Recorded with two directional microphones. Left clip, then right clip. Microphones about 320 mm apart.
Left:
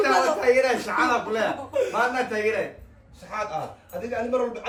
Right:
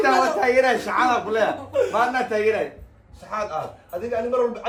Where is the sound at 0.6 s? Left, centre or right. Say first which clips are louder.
Right 3 dB; right.